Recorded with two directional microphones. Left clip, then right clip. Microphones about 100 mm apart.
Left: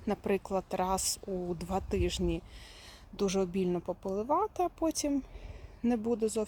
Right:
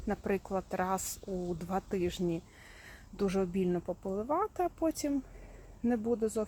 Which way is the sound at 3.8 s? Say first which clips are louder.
Left 2 dB; 20° left (ahead or behind).